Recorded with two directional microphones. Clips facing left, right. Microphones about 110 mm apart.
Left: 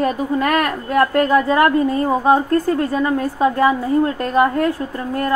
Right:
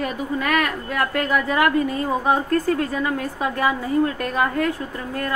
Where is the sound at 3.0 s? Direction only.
35° left (ahead or behind).